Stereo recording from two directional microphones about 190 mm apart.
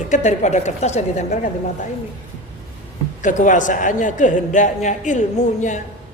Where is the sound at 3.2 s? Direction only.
40° left (ahead or behind).